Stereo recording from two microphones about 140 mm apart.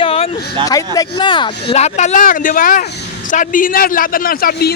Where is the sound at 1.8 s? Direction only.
55° left (ahead or behind); by 4.5 s 90° left.